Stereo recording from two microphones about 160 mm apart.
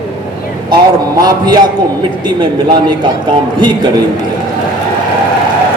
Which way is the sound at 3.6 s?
30° right (ahead or behind).